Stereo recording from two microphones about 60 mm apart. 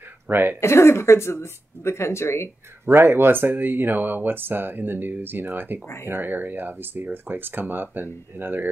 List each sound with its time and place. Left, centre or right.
0.3 s speech: right
0.6 s speech: left
2.8 s speech: right